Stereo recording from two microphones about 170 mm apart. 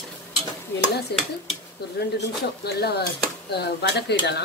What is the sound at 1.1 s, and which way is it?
A woman's voice, 75° left (ahead or behind).